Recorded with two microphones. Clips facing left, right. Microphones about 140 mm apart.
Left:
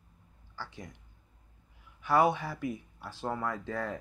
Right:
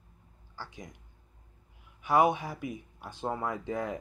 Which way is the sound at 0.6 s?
15° right (ahead or behind).